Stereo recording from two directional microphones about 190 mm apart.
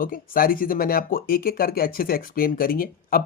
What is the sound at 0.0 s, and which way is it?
Speech, 50° left (ahead or behind).